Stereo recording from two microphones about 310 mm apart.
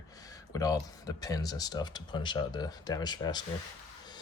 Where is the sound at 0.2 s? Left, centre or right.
Centre.